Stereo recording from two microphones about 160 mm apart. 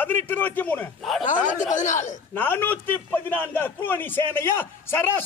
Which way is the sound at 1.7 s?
50° left (ahead or behind).